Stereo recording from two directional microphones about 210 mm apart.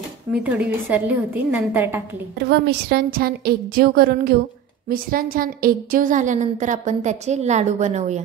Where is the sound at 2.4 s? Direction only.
50° right (ahead or behind).